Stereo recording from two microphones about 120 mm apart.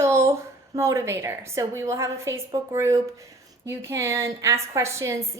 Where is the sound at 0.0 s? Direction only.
25° right (ahead or behind).